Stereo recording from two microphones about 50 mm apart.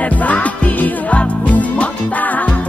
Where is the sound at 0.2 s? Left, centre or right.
Left.